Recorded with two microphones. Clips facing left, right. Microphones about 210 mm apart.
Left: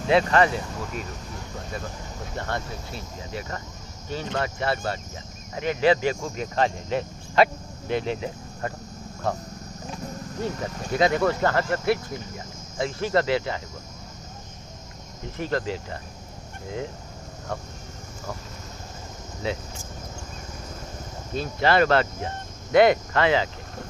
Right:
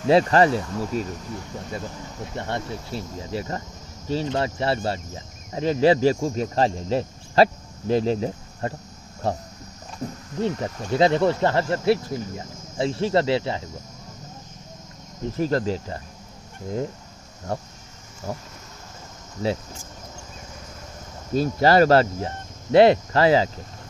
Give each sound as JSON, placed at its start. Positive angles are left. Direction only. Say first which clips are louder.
{"t": 0.1, "sound": "cricket", "louder": "right 3 dB", "side_deg": -35}
{"t": 2.3, "sound": "speech", "louder": "right 2 dB", "side_deg": -25}
{"t": 4.1, "sound": "cricket", "louder": "right 4 dB", "side_deg": -30}
{"t": 10.4, "sound": "speech", "louder": "right 5 dB", "side_deg": -30}
{"t": 15.3, "sound": "cricket", "louder": "right 4 dB", "side_deg": -40}
{"t": 19.4, "sound": "cricket", "louder": "right 4 dB", "side_deg": -35}
{"t": 21.3, "sound": "cricket", "louder": "right 5 dB", "side_deg": -40}